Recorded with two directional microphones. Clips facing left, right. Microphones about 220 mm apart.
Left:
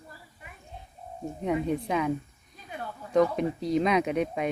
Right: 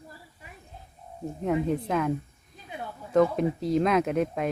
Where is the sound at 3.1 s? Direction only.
5° right (ahead or behind).